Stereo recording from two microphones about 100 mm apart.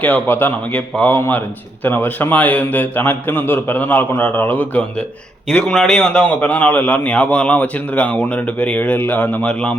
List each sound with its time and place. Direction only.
0.0 s a man's voice: 20° left (ahead or behind)